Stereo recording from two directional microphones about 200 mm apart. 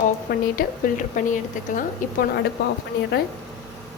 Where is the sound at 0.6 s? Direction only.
40° left (ahead or behind).